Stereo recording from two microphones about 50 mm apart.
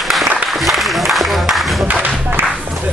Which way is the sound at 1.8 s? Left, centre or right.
Right.